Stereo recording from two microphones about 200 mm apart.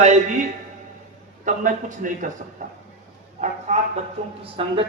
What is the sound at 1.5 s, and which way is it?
Speech, 40° right (ahead or behind).